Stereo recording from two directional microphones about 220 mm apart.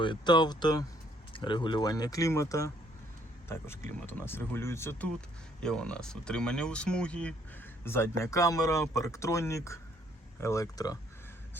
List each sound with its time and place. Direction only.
0.0 s speech: 20° left (ahead or behind)